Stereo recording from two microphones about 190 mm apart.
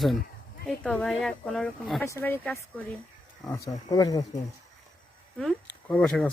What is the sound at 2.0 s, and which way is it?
Speech, 15° left (ahead or behind).